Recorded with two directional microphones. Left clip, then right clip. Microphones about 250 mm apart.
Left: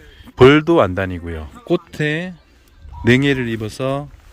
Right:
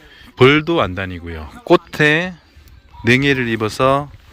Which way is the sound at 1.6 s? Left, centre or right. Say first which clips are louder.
Right 7 dB; centre.